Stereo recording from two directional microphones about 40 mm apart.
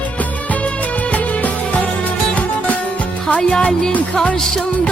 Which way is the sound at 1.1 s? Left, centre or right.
Left.